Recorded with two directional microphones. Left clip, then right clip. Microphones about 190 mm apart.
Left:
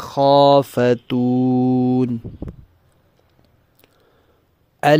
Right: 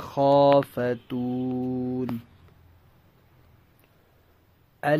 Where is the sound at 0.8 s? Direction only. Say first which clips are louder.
Left 11 dB; 50° left (ahead or behind).